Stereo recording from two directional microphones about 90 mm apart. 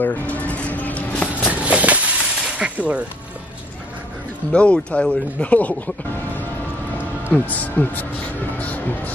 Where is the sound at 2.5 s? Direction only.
15° right (ahead or behind).